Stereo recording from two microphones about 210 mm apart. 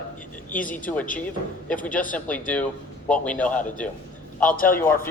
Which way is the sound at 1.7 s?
5° left (ahead or behind).